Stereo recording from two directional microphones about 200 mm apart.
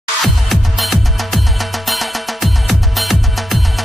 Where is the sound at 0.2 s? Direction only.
Centre (ahead or behind).